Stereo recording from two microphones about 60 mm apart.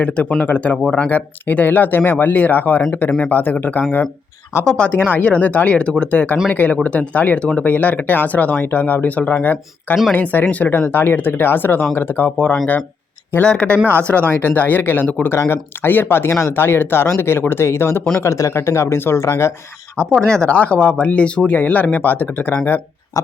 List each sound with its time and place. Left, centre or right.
0.0 s speech: left
4.6 s speech: centre
4.9 s speech: left
8.5 s speech: left
13.4 s speech: centre
13.7 s speech: right
14.1 s speech: left
18.2 s speech: left
18.9 s speech: left
19.2 s speech: left
20.1 s speech: centre
20.5 s speech: left
23.1 s a sound: left